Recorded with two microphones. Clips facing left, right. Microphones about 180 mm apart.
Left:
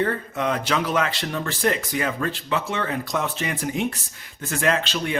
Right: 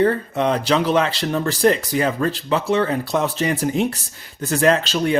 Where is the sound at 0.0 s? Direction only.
30° right (ahead or behind).